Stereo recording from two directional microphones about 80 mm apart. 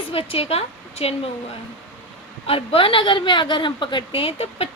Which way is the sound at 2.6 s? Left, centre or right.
Left.